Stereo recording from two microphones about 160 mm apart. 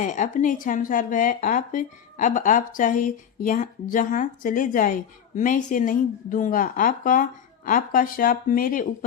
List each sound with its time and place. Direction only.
0.0 s a woman's voice: 50° left (ahead or behind)